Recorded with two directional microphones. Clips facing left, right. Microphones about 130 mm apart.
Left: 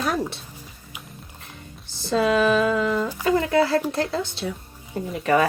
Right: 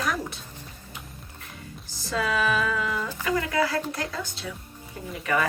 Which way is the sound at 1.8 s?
30° left (ahead or behind).